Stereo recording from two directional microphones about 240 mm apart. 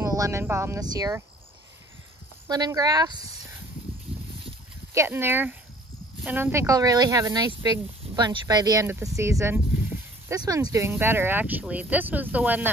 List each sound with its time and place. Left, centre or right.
0.0 s speech: centre
2.4 s speech: centre
4.9 s speech: centre